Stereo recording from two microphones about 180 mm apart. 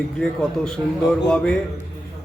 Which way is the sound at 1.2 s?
5° left (ahead or behind).